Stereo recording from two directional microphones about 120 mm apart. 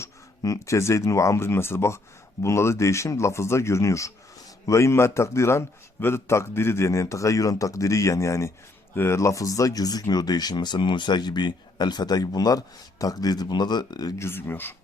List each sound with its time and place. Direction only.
0.0 s a man's voice: 25° left (ahead or behind)
14.2 s a man's voice: 20° left (ahead or behind)